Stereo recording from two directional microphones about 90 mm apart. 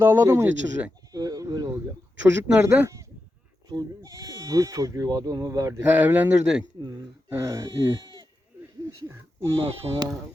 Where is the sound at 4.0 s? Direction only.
40° right (ahead or behind).